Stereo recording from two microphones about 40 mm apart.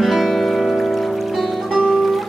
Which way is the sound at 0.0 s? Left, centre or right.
Centre.